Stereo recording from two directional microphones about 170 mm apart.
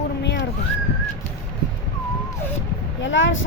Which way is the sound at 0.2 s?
90° left.